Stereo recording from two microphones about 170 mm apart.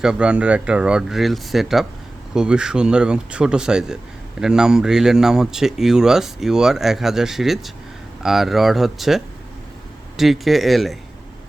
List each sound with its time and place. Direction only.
0.0 s speech: 5° right (ahead or behind)